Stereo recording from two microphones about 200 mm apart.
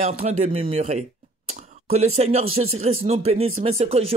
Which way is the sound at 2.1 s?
35° right (ahead or behind).